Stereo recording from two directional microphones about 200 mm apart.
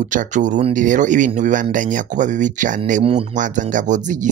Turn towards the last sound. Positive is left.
turn(degrees=-40)  # may be behind; listen again after turning